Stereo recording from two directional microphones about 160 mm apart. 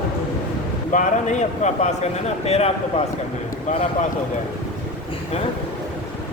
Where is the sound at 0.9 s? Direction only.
50° left (ahead or behind).